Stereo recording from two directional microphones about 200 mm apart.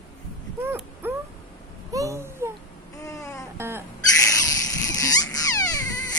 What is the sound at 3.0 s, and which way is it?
Baby cry, 15° left (ahead or behind).